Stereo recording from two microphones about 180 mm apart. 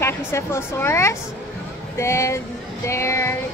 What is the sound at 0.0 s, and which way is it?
Music, 15° left (ahead or behind).